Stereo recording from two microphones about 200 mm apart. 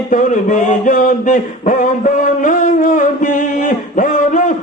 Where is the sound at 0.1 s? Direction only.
40° left (ahead or behind).